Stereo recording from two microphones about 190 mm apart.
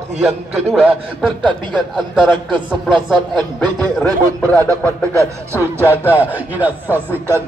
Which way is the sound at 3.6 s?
20° right (ahead or behind).